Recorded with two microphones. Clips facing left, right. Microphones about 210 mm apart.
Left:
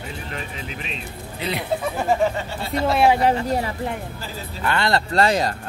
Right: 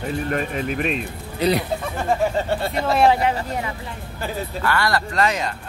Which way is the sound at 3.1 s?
35° left (ahead or behind).